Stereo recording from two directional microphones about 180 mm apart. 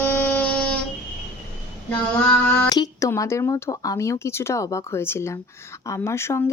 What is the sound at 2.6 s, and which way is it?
Speech, 20° left (ahead or behind).